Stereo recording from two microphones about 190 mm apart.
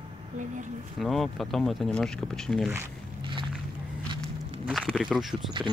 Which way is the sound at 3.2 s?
25° right (ahead or behind).